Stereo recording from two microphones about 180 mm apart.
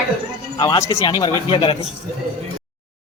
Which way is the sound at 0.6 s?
20° left (ahead or behind).